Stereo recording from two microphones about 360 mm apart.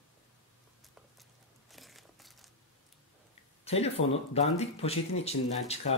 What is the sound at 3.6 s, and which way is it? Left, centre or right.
Speech, centre.